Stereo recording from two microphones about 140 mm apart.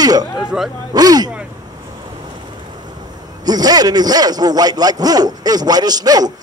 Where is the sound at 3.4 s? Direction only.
30° right (ahead or behind).